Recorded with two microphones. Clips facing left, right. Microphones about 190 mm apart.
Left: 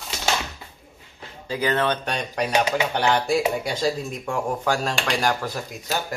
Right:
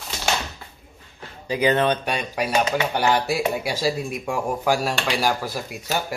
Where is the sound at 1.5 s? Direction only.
20° right (ahead or behind).